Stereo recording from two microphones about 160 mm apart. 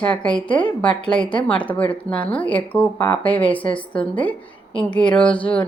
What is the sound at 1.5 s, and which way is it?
A woman's voice, 10° left (ahead or behind).